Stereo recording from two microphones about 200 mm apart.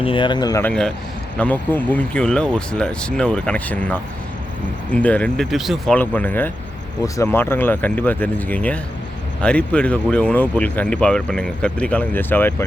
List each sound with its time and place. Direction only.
0.0 s speech: 25° left (ahead or behind)
0.7 s speech: 5° left (ahead or behind)